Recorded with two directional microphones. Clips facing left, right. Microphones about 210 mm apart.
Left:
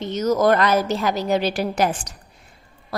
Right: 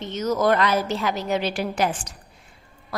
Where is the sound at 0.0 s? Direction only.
40° left (ahead or behind).